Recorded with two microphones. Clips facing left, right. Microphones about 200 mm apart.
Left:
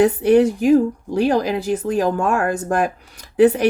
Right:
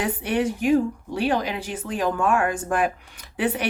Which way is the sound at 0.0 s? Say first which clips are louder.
Left 10 dB; 40° left (ahead or behind).